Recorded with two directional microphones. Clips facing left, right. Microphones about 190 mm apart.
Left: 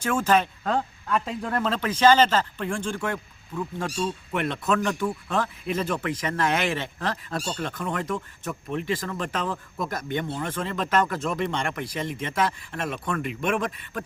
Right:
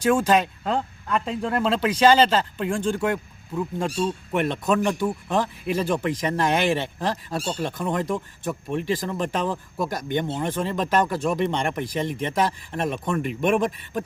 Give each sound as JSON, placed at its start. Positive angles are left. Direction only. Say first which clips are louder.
{"t": 0.0, "sound": "speech", "louder": "right 3 dB", "side_deg": -15}
{"t": 0.7, "sound": "speech", "louder": "even", "side_deg": 0}
{"t": 1.5, "sound": "speech", "louder": "right 4 dB", "side_deg": -15}